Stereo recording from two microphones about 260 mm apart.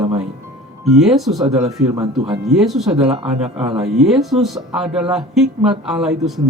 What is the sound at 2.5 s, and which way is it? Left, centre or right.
Speech, centre.